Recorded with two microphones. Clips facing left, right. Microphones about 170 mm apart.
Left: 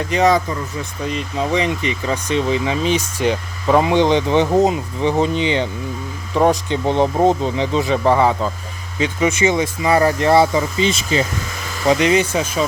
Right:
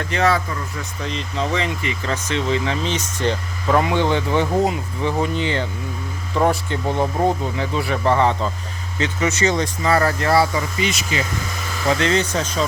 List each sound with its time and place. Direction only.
0.1 s speech: 15° left (ahead or behind)
11.9 s speech: 15° left (ahead or behind)